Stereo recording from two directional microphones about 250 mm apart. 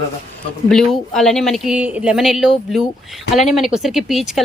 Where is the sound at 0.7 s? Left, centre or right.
Centre.